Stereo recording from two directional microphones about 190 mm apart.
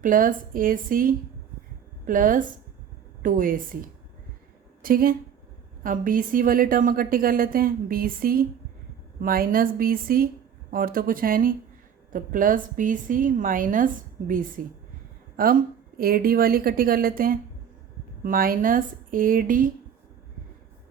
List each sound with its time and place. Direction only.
0.0 s a woman's voice: 45° right (ahead or behind)